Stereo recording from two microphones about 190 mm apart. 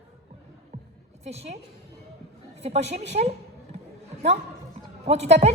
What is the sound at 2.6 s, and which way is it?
Speech, 35° right (ahead or behind).